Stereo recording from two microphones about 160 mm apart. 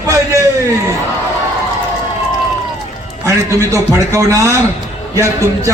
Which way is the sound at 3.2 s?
20° right (ahead or behind).